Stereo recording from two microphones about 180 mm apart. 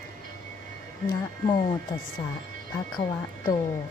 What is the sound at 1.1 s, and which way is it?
Speech, 20° left (ahead or behind).